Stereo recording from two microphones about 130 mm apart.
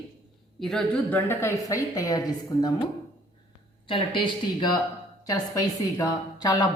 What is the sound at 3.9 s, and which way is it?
Speech, 40° left (ahead or behind).